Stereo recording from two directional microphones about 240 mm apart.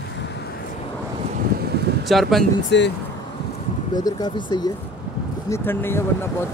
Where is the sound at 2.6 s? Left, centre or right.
Left.